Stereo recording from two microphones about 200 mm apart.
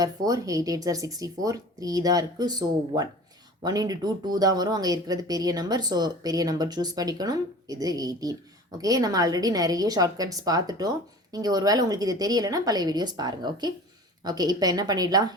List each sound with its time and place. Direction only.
0.0 s a woman's voice: 15° right (ahead or behind)